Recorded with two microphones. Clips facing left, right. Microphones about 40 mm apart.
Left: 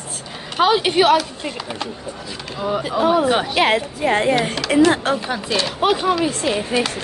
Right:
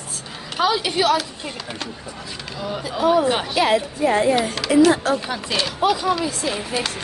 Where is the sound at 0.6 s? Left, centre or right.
Left.